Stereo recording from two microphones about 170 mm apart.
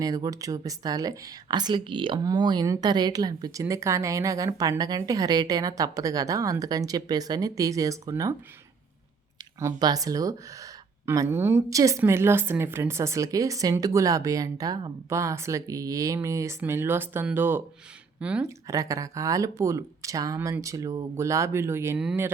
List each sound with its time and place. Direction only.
0.0 s speech: 20° right (ahead or behind)
9.6 s a woman's voice: 20° right (ahead or behind)
18.4 s a woman's voice: 20° right (ahead or behind)